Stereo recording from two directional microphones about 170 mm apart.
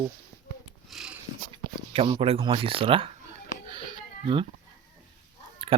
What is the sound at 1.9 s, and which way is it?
Speech, 35° right (ahead or behind).